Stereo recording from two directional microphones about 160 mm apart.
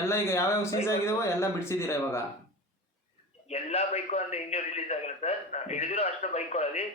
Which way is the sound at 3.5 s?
40° left (ahead or behind).